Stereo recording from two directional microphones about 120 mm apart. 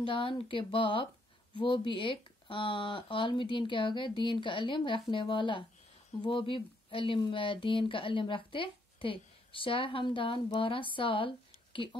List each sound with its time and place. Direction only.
0.0 s speech: 45° left (ahead or behind)